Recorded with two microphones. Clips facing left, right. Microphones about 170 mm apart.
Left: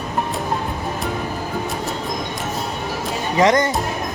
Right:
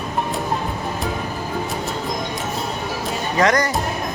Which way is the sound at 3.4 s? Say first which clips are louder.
Left 2 dB; 20° left (ahead or behind).